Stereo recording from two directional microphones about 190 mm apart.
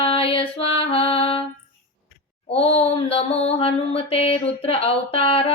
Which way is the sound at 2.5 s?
30° left (ahead or behind).